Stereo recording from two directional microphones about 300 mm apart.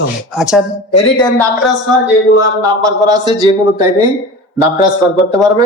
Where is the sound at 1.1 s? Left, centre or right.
Centre.